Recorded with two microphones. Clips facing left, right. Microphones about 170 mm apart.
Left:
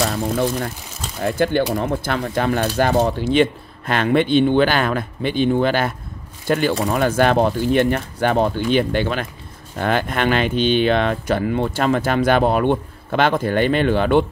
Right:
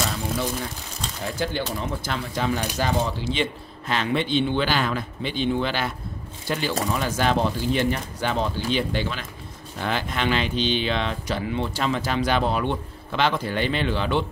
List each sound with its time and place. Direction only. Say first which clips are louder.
0.0 s speech: left 7 dB; 55° left (ahead or behind)